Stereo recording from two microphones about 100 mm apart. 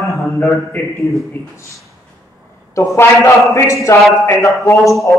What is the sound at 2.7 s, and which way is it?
A man's voice, 30° left (ahead or behind).